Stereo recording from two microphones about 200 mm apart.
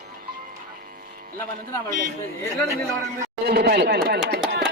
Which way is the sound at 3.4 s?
50° right (ahead or behind).